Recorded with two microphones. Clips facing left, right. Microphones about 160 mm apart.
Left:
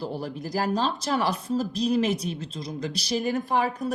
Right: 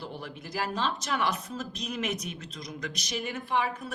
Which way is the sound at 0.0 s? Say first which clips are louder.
Left 8 dB; 35° left (ahead or behind).